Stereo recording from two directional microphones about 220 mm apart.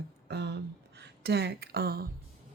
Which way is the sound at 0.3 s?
50° right (ahead or behind).